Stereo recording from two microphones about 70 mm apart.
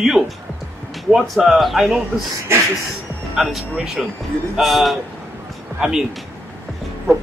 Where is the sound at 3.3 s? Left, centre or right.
Centre.